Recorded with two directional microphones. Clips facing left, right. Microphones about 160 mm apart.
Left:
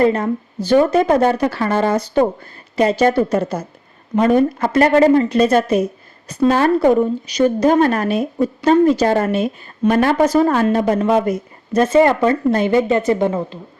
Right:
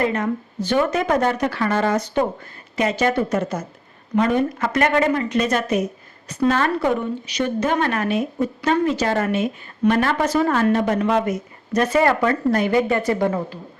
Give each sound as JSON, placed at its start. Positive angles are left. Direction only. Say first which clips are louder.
{"t": 0.0, "sound": "speech", "louder": "left 6 dB", "side_deg": 35}
{"t": 11.7, "sound": "a woman's voice", "louder": "left 5 dB", "side_deg": 25}